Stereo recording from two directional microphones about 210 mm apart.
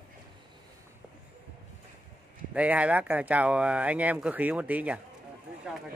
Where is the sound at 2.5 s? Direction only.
5° right (ahead or behind).